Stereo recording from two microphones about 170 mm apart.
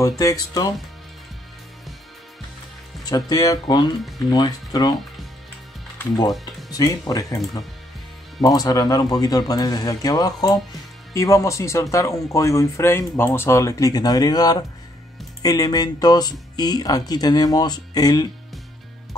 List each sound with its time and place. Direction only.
0.2 s speech: 20° left (ahead or behind)
3.1 s speech: 25° left (ahead or behind)
5.9 s speech: 20° left (ahead or behind)
8.4 s speech: 20° left (ahead or behind)